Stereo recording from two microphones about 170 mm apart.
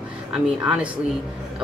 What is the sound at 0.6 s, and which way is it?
Speech, 5° right (ahead or behind).